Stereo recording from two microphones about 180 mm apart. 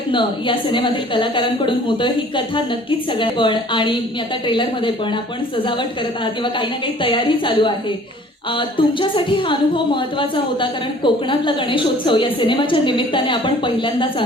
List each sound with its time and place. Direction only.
0.1 s a woman's voice: 25° left (ahead or behind)
6.2 s a woman's voice: 25° left (ahead or behind)